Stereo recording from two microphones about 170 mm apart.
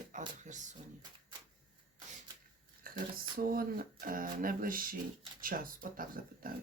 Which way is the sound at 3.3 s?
60° right (ahead or behind).